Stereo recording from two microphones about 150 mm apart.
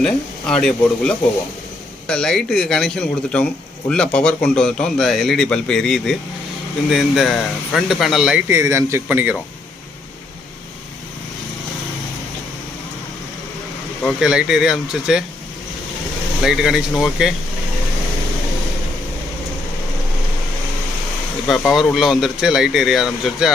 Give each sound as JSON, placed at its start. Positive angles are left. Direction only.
{"t": 0.0, "sound": "speech", "side_deg": 5}
{"t": 8.4, "sound": "speech", "side_deg": -15}
{"t": 14.0, "sound": "speech", "side_deg": 0}
{"t": 16.4, "sound": "speech", "side_deg": -5}
{"t": 21.4, "sound": "speech", "side_deg": 0}